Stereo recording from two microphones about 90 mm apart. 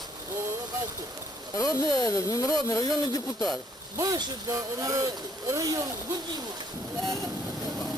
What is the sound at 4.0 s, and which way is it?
Speech, 45° right (ahead or behind).